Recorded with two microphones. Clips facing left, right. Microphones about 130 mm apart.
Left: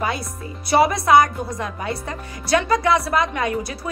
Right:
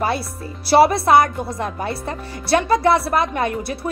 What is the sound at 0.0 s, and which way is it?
Speech, 30° right (ahead or behind).